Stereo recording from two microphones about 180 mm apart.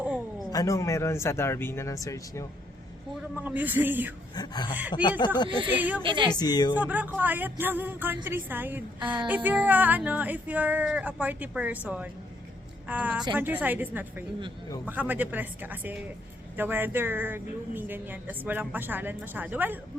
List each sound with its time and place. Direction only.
0.5 s speech: 20° left (ahead or behind)
3.4 s speech: 10° right (ahead or behind)
4.4 s a woman's voice: 25° left (ahead or behind)
5.5 s speech: 30° right (ahead or behind)
6.3 s a woman's voice: 20° left (ahead or behind)
6.7 s speech: 10° right (ahead or behind)
12.9 s speech: 10° right (ahead or behind)